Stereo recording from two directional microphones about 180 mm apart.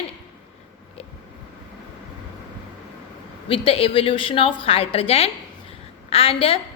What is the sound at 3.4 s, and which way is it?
A woman's voice, 30° left (ahead or behind).